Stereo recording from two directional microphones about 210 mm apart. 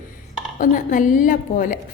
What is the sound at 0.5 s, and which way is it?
Speech, 40° left (ahead or behind).